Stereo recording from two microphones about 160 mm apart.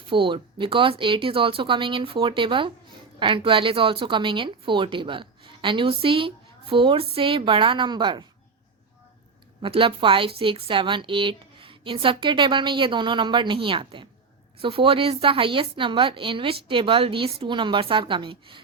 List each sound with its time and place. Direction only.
0.1 s speech: 30° right (ahead or behind)
9.6 s speech: 35° right (ahead or behind)